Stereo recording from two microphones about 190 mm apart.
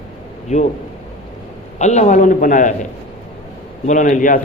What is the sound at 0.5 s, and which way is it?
Speech, 40° left (ahead or behind).